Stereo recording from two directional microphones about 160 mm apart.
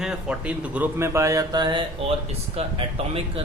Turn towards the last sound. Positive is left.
turn(degrees=-40)  # may be behind; listen again after turning